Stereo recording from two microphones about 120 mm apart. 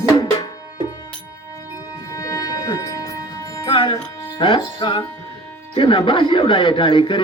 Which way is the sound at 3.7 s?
45° left (ahead or behind).